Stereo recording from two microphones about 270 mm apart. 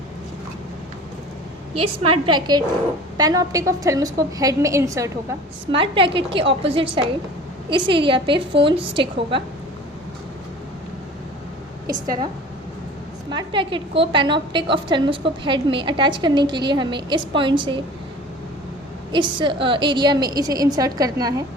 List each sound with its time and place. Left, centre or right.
1.7 s a woman's voice: right
11.9 s a woman's voice: centre
13.3 s a woman's voice: centre
19.1 s a woman's voice: centre